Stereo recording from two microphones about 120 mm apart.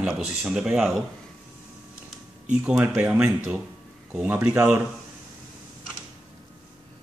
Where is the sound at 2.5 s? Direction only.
10° right (ahead or behind).